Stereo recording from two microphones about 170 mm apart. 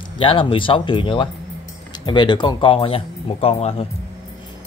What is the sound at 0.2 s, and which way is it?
Speech, 30° left (ahead or behind).